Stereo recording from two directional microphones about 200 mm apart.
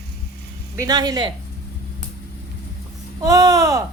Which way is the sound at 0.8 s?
20° right (ahead or behind).